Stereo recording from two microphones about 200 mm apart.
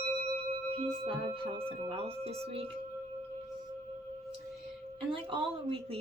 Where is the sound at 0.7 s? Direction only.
30° right (ahead or behind).